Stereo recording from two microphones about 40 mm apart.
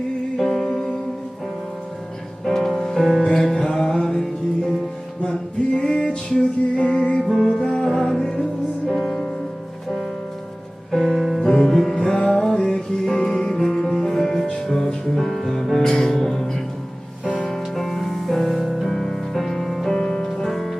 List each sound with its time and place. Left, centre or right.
0.3 s music: centre
2.5 s music: centre
10.9 s music: centre
11.4 s music: centre
11.9 s music: left; by 20.0 s centre
20.0 s music: left
20.2 s music: centre